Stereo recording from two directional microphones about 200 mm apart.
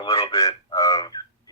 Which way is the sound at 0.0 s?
15° left (ahead or behind).